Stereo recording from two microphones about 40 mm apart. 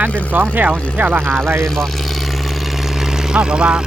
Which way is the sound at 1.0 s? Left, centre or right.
Right.